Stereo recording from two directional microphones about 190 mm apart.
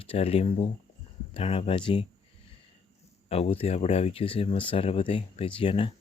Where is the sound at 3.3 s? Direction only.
30° left (ahead or behind).